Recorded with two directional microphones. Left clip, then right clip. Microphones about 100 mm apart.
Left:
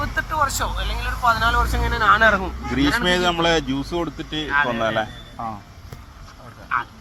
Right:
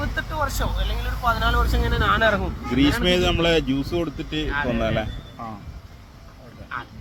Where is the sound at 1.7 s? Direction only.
20° right (ahead or behind).